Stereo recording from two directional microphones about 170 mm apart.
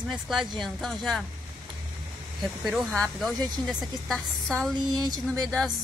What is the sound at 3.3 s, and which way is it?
Speech, 25° right (ahead or behind).